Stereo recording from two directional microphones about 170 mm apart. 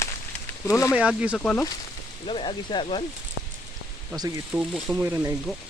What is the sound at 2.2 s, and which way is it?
Speech, 30° left (ahead or behind).